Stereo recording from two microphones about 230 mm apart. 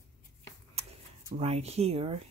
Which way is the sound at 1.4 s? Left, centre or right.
Right.